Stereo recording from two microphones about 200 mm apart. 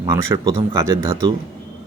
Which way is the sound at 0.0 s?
15° right (ahead or behind).